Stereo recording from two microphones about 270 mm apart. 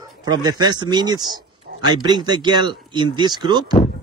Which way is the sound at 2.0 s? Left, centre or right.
Centre.